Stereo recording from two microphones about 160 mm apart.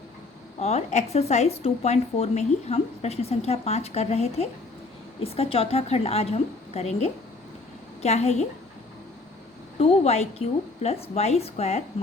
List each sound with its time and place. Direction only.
0.6 s a woman's voice: 45° left (ahead or behind)
9.8 s a woman's voice: 40° left (ahead or behind)